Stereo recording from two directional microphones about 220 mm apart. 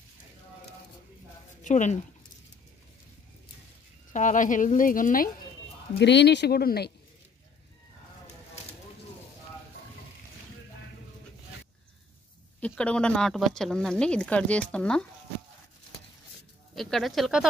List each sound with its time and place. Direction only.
1.6 s speech: 35° left (ahead or behind)
4.1 s speech: 35° left (ahead or behind)
5.9 s speech: 50° left (ahead or behind)
12.5 s speech: 5° left (ahead or behind)
16.7 s speech: centre (ahead or behind)